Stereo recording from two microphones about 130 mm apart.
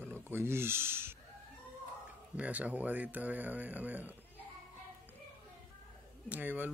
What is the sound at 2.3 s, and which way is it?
Speech, 10° right (ahead or behind).